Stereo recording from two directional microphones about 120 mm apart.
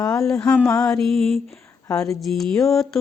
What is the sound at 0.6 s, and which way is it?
Speech, 10° left (ahead or behind).